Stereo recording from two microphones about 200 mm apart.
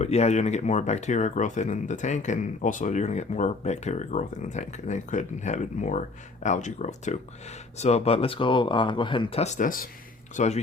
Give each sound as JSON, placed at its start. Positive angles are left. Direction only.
{"t": 0.0, "sound": "speech", "side_deg": 35}